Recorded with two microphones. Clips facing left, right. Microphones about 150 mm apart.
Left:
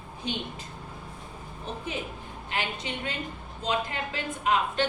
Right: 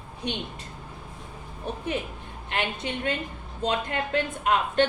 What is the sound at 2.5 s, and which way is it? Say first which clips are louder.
A woman's voice: right 3 dB; 55° right (ahead or behind).